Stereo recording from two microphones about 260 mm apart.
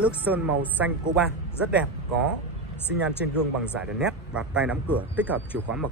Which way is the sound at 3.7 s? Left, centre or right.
Centre.